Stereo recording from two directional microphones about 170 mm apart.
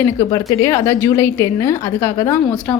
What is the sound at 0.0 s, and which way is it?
A woman's voice, 20° left (ahead or behind).